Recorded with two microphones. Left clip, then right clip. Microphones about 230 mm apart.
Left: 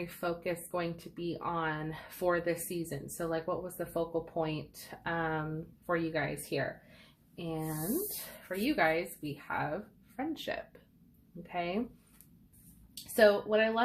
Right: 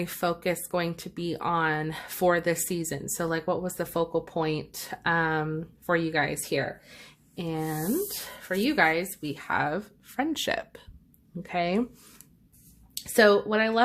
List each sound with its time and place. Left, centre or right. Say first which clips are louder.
0.0 s speech: right 8 dB; right
12.9 s speech: right 5 dB; right